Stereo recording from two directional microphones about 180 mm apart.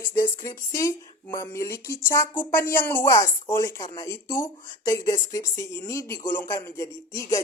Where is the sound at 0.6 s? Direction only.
15° left (ahead or behind).